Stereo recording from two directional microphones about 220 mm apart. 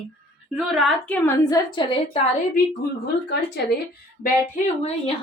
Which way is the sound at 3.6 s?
50° left (ahead or behind).